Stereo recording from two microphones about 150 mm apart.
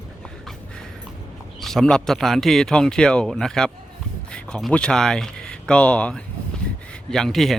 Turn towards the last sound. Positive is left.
turn(degrees=0)  # may be behind; listen again after turning